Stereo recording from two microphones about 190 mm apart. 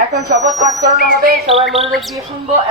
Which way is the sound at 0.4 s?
20° right (ahead or behind).